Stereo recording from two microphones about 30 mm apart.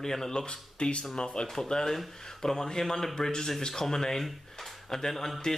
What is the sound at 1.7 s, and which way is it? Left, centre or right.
Speech, centre.